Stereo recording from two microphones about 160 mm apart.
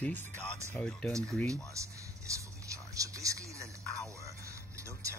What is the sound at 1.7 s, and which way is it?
Speech, 20° right (ahead or behind).